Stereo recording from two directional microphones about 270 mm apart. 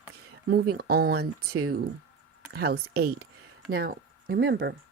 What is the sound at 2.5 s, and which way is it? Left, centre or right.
Speech, right.